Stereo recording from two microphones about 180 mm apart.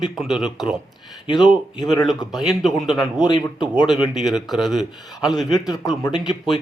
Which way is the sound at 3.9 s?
Centre (ahead or behind).